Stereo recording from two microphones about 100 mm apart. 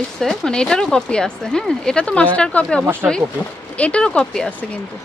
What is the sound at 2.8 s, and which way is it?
Speech, 20° right (ahead or behind).